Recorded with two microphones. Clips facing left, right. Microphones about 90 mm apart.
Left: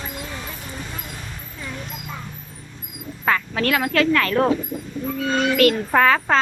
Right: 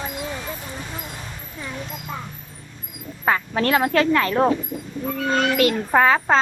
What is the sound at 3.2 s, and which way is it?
Speech, 25° right (ahead or behind).